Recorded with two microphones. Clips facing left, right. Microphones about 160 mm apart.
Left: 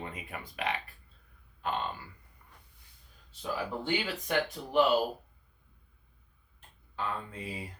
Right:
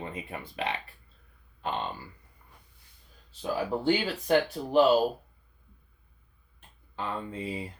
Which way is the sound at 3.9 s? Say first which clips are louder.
Right 8 dB; 35° right (ahead or behind).